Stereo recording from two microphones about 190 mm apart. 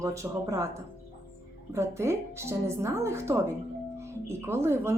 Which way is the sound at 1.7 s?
15° right (ahead or behind).